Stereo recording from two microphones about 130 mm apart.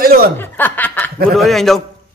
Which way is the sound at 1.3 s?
Centre (ahead or behind).